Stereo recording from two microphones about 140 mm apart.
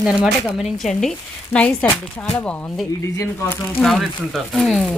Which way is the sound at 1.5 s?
10° left (ahead or behind).